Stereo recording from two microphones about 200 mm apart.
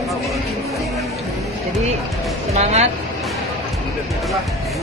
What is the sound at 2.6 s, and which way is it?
Speech, 30° right (ahead or behind).